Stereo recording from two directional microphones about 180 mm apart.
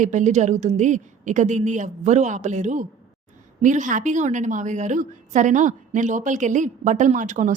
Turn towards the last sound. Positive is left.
turn(degrees=-40)  # may be behind; listen again after turning